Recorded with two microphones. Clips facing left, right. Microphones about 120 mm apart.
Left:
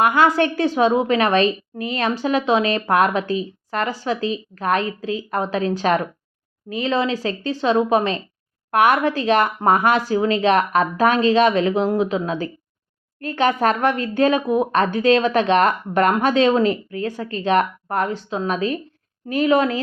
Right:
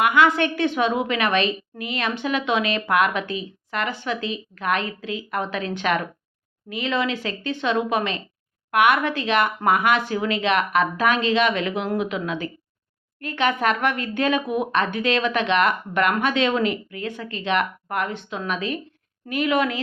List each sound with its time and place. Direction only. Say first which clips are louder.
0.0 s a woman's voice: left 2 dB; 40° left (ahead or behind)